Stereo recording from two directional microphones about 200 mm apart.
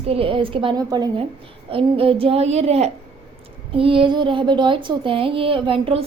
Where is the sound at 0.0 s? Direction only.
30° right (ahead or behind).